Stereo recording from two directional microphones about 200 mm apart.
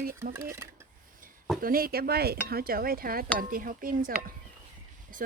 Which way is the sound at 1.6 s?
45° right (ahead or behind).